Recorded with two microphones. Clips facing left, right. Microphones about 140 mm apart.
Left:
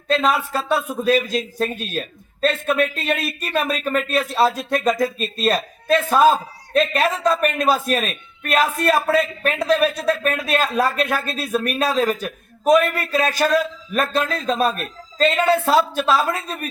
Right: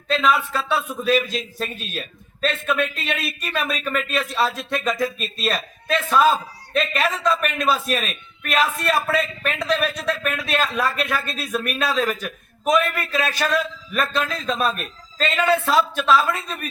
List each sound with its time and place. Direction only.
0.1 s a man's voice: 40° left (ahead or behind)